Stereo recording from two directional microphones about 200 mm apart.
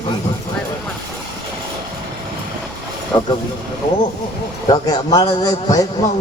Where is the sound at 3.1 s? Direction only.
20° left (ahead or behind).